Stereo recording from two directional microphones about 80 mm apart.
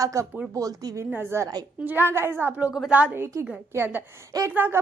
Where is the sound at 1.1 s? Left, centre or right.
Right.